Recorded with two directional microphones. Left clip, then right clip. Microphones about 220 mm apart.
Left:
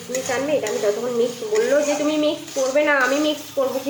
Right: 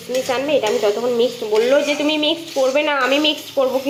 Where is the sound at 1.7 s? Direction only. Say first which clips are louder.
Right 3 dB; 5° right (ahead or behind).